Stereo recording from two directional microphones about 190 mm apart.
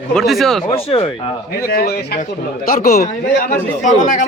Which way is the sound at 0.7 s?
30° left (ahead or behind).